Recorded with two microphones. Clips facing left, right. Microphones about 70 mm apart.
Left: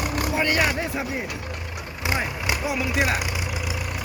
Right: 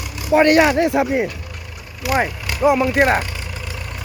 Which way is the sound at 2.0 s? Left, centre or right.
Left.